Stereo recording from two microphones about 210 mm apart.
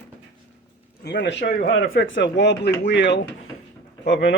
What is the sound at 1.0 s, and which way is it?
Speech, 55° left (ahead or behind).